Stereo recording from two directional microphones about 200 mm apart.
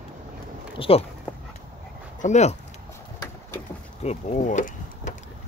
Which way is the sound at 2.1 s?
35° left (ahead or behind).